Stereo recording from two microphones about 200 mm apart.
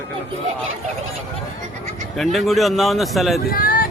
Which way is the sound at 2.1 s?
Centre (ahead or behind).